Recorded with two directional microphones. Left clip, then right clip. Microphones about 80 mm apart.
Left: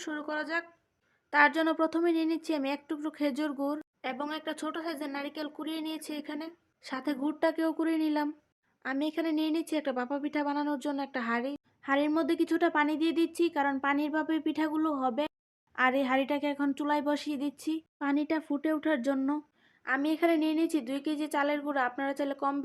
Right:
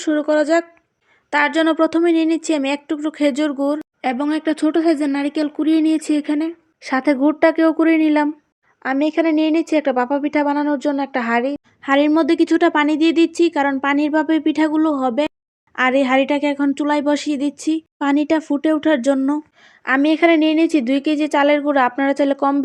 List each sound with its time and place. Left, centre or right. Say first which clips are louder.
0.0 s speech: right 18 dB; right
8.8 s a woman's voice: right 15 dB; right
11.8 s speech: right 13 dB; right
18.0 s speech: right 13 dB; right